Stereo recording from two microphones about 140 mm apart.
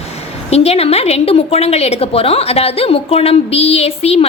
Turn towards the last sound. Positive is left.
turn(degrees=50)  # may be behind; listen again after turning